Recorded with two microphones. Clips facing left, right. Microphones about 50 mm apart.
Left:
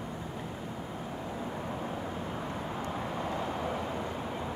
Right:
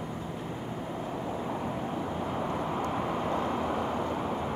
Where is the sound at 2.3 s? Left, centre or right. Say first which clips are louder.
Right 5 dB; right.